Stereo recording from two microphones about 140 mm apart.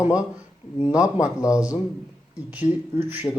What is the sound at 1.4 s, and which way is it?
Speech, 25° left (ahead or behind).